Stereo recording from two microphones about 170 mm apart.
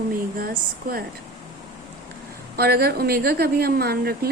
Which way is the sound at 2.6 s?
65° right (ahead or behind).